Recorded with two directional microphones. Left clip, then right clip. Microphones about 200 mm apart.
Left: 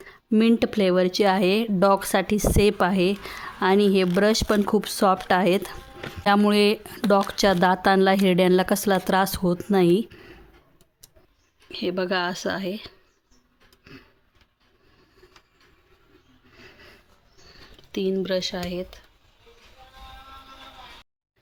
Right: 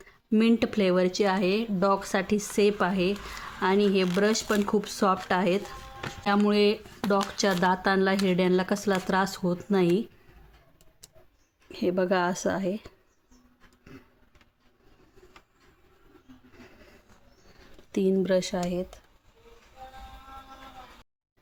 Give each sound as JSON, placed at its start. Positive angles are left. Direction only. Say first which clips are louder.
{"t": 0.0, "sound": "speech", "louder": "left 4 dB", "side_deg": 45}
{"t": 11.7, "sound": "speech", "louder": "even", "side_deg": 0}
{"t": 16.5, "sound": "a sound", "louder": "left 6 dB", "side_deg": -10}
{"t": 17.9, "sound": "speech", "louder": "even", "side_deg": -10}